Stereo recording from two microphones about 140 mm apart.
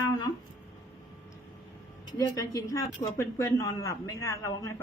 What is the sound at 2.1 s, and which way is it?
Speech, 25° left (ahead or behind).